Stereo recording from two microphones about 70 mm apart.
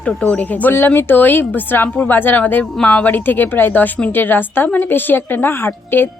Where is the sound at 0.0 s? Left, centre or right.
Centre.